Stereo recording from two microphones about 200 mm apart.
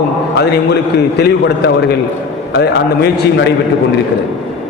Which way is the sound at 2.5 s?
55° left (ahead or behind).